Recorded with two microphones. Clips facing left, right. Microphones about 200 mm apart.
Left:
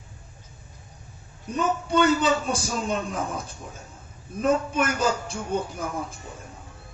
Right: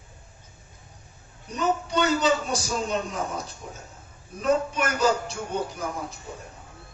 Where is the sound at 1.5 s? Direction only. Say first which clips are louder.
Left 2 dB; 55° left (ahead or behind).